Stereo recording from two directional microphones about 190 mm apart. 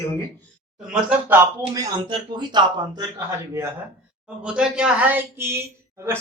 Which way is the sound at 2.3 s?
25° right (ahead or behind).